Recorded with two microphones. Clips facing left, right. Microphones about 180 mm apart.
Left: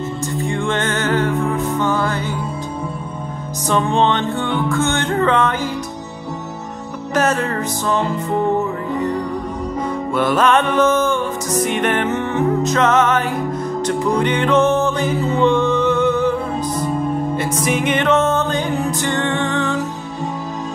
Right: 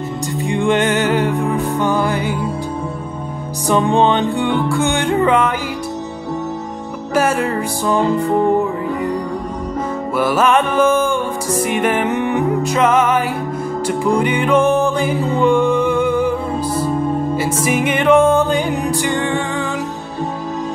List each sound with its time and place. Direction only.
0.4 s music: 15° right (ahead or behind)
3.6 s music: 15° right (ahead or behind)
7.2 s music: 10° right (ahead or behind)
10.1 s music: 5° right (ahead or behind)